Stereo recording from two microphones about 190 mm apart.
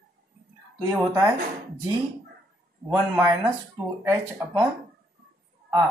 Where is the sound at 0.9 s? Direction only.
15° right (ahead or behind).